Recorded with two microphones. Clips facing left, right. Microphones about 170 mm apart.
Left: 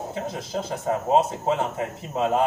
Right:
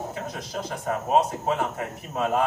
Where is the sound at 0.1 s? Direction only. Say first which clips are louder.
Left 4 dB; 25° left (ahead or behind).